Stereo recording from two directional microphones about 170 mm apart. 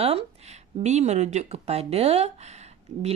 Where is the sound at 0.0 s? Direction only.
35° right (ahead or behind).